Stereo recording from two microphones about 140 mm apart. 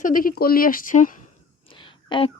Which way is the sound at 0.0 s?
85° left.